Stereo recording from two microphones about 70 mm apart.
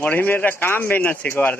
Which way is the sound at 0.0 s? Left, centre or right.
Left.